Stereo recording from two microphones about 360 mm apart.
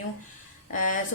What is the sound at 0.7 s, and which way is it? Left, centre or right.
Speech, left.